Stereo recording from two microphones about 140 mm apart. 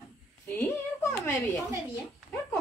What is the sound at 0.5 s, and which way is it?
Speech, 20° left (ahead or behind).